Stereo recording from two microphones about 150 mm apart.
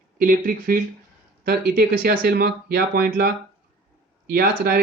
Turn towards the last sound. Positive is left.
turn(degrees=-85)